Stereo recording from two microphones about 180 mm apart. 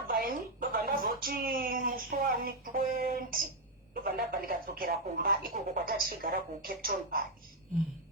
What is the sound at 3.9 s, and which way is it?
Speech, 55° right (ahead or behind).